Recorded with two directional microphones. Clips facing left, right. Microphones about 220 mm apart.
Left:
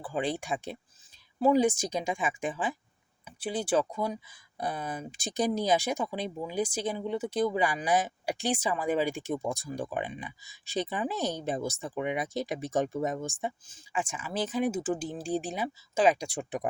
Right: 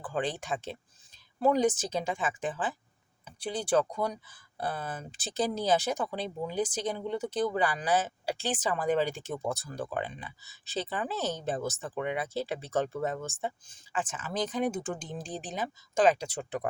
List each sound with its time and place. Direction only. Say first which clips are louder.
0.0 s speech: left 1 dB; 10° left (ahead or behind)